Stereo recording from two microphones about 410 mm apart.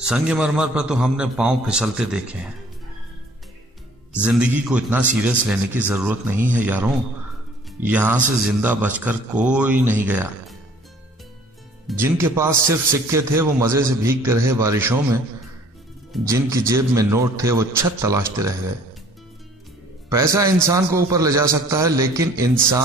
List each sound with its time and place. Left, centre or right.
0.0 s a man's voice: centre
4.1 s a man's voice: centre
12.0 s a man's voice: centre
20.1 s a man's voice: centre